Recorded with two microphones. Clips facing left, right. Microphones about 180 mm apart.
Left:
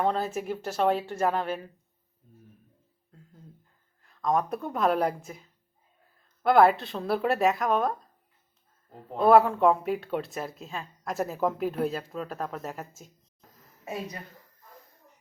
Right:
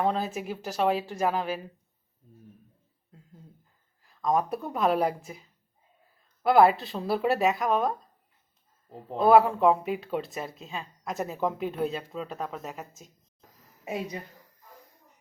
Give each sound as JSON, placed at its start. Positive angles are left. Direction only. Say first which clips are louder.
{"t": 0.0, "sound": "speech", "louder": "even", "side_deg": -5}
{"t": 4.0, "sound": "speech", "louder": "even", "side_deg": 0}
{"t": 6.4, "sound": "speech", "louder": "even", "side_deg": 0}
{"t": 9.1, "sound": "speech", "louder": "even", "side_deg": 0}
{"t": 13.5, "sound": "a sound", "louder": "right 2 dB", "side_deg": -15}